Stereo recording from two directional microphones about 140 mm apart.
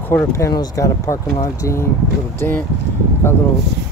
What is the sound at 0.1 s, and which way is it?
Speech, 20° left (ahead or behind).